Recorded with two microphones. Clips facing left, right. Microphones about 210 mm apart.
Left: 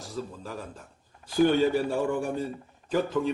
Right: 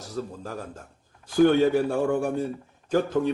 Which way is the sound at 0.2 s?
45° right (ahead or behind).